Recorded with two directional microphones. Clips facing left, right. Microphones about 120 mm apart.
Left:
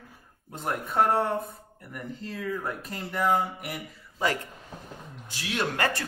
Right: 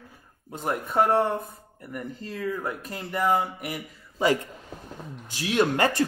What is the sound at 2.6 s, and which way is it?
Speech, 5° right (ahead or behind).